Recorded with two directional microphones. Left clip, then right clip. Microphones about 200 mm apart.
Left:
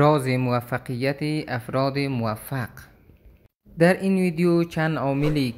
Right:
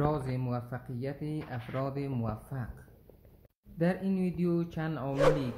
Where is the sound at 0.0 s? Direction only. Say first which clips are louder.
Left 13 dB; 30° left (ahead or behind).